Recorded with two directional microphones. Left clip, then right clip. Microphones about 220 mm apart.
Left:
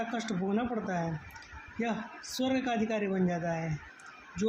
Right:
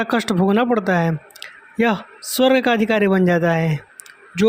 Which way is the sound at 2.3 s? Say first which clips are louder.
Right 16 dB; 50° right (ahead or behind).